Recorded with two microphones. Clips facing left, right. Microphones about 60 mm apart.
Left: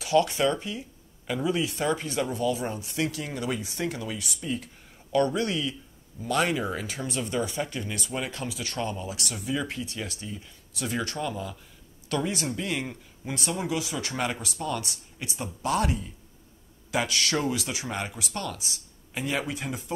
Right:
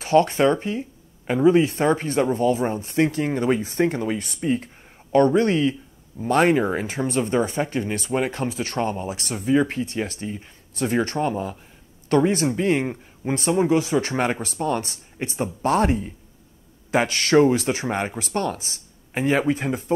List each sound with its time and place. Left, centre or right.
0.0 s speech: right